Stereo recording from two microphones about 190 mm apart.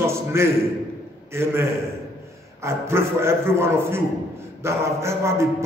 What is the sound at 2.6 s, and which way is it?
A man's voice, 15° right (ahead or behind).